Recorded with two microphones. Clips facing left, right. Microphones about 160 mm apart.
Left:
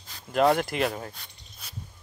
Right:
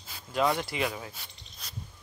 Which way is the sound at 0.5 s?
60° left (ahead or behind).